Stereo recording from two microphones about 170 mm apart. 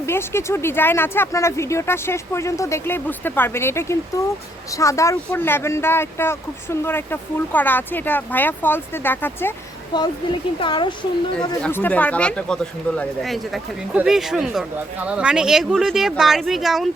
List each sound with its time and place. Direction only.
0.0 s speech: 15° left (ahead or behind)
9.9 s speech: 25° left (ahead or behind)
11.6 s speech: 10° left (ahead or behind)